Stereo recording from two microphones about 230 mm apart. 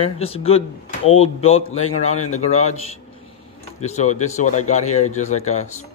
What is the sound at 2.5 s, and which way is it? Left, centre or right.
Speech, left.